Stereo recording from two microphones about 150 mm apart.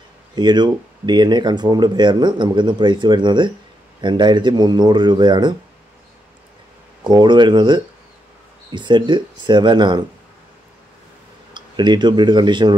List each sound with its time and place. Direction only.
0.4 s speech: 30° right (ahead or behind)
7.1 s speech: 30° right (ahead or behind)
11.5 s speech: 30° right (ahead or behind)